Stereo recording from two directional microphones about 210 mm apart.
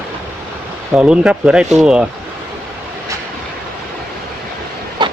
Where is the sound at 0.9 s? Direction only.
5° right (ahead or behind).